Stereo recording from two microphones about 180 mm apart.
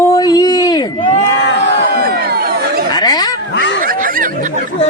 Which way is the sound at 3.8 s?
50° right (ahead or behind).